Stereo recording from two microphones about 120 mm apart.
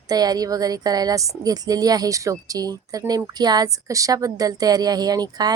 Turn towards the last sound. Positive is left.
turn(degrees=-35)  # may be behind; listen again after turning